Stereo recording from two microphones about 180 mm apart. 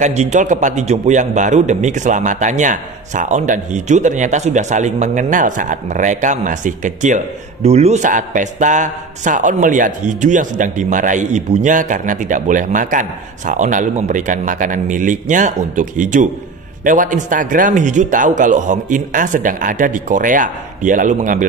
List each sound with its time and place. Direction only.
0.0 s a man's voice: 40° right (ahead or behind)